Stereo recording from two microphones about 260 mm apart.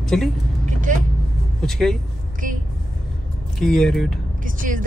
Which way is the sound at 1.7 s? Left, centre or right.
Centre.